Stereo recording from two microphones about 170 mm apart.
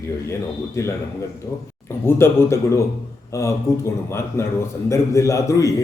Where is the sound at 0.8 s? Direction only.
15° left (ahead or behind).